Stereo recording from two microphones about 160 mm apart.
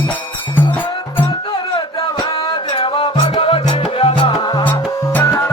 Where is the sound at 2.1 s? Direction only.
30° left (ahead or behind).